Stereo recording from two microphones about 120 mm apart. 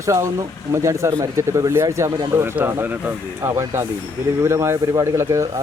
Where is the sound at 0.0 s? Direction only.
25° right (ahead or behind).